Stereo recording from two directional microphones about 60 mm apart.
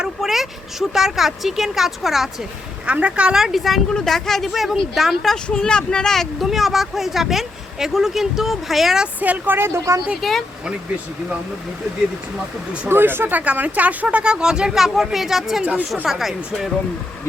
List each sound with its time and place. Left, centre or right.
0.0 s speech: centre
2.8 s speech: centre
3.3 s speech: centre
5.5 s speech: centre
6.4 s speech: centre
9.2 s speech: right
9.6 s speech: right
10.2 s speech: centre
12.9 s speech: right
13.4 s speech: right; by 15.6 s centre
15.6 s speech: right
16.0 s speech: centre